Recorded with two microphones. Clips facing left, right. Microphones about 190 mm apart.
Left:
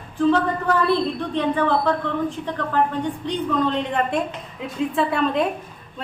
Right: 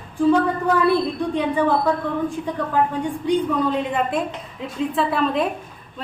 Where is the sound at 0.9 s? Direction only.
10° right (ahead or behind).